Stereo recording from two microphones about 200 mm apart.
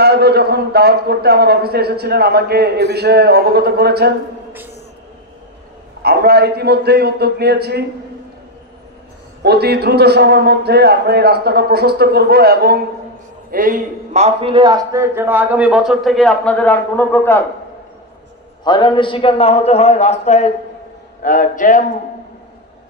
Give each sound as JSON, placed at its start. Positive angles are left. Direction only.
{"t": 0.0, "sound": "a man's voice", "side_deg": -55}
{"t": 6.0, "sound": "a man's voice", "side_deg": -55}
{"t": 9.4, "sound": "a man's voice", "side_deg": -55}
{"t": 18.6, "sound": "a man's voice", "side_deg": 25}